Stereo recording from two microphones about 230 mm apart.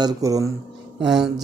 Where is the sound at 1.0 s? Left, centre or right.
Centre.